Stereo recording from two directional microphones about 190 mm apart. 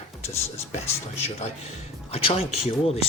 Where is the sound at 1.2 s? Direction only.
35° left (ahead or behind).